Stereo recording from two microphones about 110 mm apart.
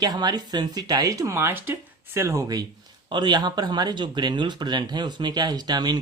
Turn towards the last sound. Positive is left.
turn(degrees=-40)  # may be behind; listen again after turning